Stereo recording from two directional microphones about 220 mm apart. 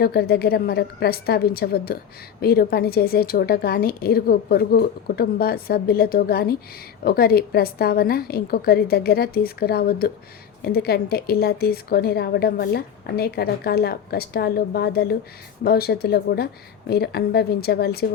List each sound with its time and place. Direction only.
0.0 s speech: 45° left (ahead or behind)